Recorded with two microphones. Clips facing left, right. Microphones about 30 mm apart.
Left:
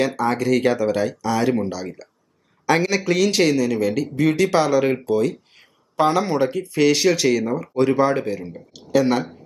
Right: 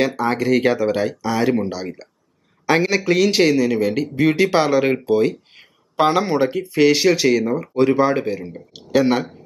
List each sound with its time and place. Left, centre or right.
0.0 s speech: centre
8.7 s speech: centre